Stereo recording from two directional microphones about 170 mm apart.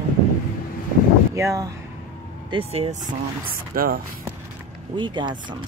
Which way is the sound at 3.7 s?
55° right (ahead or behind).